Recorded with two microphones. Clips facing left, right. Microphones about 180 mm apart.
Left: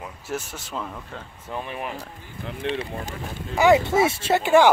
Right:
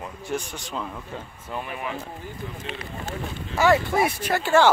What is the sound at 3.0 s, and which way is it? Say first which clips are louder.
Speech: right 1 dB; 15° left (ahead or behind).